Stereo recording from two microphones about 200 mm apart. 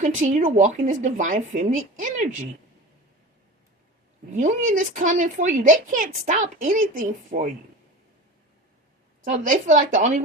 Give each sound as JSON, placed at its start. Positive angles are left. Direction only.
{"t": 0.2, "sound": "a woman's voice", "side_deg": -35}
{"t": 4.3, "sound": "a woman's voice", "side_deg": -40}
{"t": 9.3, "sound": "a woman's voice", "side_deg": -40}